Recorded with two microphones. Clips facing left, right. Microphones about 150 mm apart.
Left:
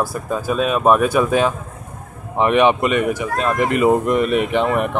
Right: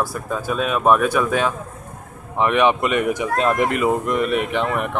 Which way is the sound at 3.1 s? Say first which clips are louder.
Right 1 dB; 15° right (ahead or behind).